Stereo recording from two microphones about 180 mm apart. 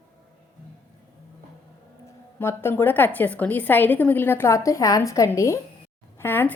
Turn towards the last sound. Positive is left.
turn(degrees=10)  # may be behind; listen again after turning